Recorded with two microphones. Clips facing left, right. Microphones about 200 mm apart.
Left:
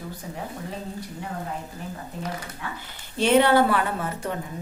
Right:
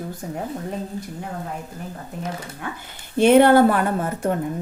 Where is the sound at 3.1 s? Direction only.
50° right (ahead or behind).